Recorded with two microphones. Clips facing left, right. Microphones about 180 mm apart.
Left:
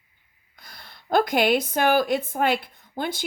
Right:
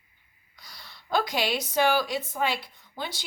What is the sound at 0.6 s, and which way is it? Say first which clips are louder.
A woman's voice: left 2 dB; 55° left (ahead or behind).